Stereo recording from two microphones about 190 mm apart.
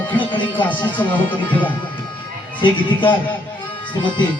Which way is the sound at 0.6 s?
10° left (ahead or behind).